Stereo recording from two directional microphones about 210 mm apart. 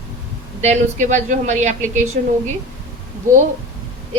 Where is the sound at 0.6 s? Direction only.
35° right (ahead or behind).